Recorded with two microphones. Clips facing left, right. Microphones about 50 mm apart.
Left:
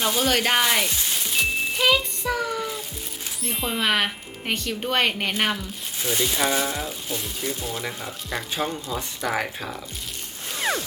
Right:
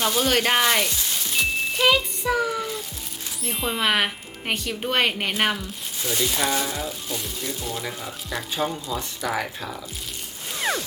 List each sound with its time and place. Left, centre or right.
0.0 s speech: centre
1.3 s music: centre
3.4 s speech: centre
6.1 s speech: centre
9.3 s speech: centre